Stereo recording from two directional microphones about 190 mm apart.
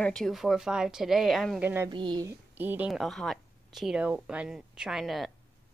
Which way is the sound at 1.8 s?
25° right (ahead or behind).